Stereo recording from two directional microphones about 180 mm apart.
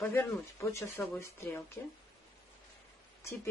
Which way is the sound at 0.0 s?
15° left (ahead or behind).